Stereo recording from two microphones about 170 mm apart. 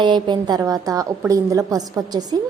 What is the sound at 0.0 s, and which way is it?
A woman's voice, 25° right (ahead or behind).